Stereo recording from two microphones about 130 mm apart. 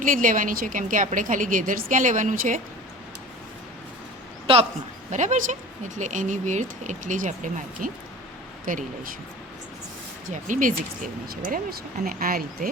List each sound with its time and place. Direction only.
0.0 s a woman's voice: 90° right
5.1 s a woman's voice: 70° right (ahead or behind); by 8.8 s 90° right
10.3 s a woman's voice: 75° right (ahead or behind); by 12.4 s 90° right